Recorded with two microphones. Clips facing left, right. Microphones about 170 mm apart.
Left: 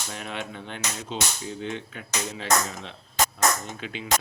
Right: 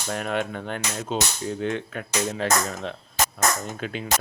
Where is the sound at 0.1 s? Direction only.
50° right (ahead or behind).